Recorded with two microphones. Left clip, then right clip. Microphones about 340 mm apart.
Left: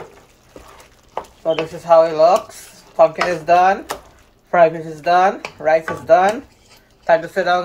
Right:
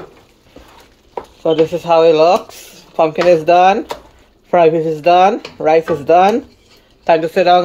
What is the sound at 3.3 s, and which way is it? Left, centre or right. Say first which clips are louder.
Speech: right 5 dB; right.